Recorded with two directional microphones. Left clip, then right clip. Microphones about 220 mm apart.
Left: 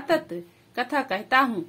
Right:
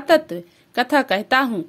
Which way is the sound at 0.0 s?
40° right (ahead or behind).